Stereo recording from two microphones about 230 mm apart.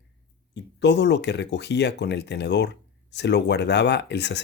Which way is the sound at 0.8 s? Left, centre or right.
Left.